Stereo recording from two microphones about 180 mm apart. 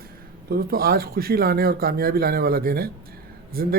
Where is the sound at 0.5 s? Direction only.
55° right (ahead or behind).